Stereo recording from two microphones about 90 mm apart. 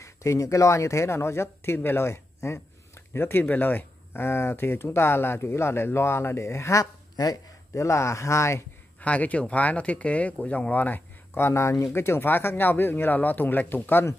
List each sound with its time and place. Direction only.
0.0 s speech: 35° left (ahead or behind)
9.0 s speech: 15° left (ahead or behind)